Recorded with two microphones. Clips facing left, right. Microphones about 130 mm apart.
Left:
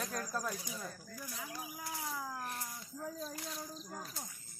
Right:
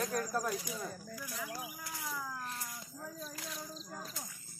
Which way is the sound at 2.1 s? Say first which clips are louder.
Even; 25° left (ahead or behind).